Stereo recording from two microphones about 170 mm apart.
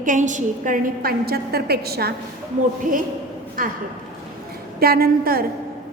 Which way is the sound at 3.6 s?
55° right (ahead or behind).